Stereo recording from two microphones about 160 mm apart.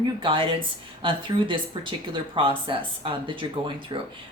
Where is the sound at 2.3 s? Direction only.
30° right (ahead or behind).